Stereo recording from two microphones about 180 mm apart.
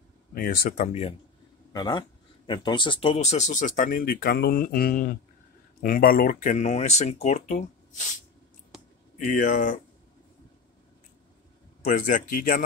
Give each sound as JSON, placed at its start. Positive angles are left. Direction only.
{"t": 0.3, "sound": "speech", "side_deg": 55}
{"t": 1.7, "sound": "speech", "side_deg": 25}
{"t": 9.3, "sound": "speech", "side_deg": 50}
{"t": 11.8, "sound": "speech", "side_deg": 45}